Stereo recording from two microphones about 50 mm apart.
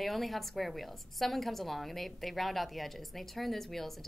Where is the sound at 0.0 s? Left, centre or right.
Centre.